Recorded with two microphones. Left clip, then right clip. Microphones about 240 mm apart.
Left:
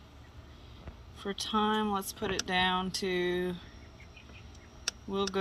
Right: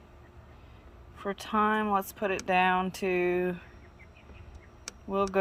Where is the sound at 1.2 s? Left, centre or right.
Centre.